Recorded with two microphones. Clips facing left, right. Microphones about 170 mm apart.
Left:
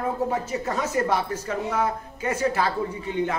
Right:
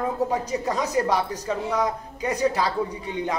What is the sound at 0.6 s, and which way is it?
A woman's voice, 15° right (ahead or behind).